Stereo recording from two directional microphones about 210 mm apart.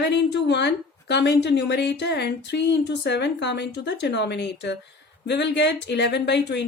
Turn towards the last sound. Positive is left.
turn(degrees=55)  # may be behind; listen again after turning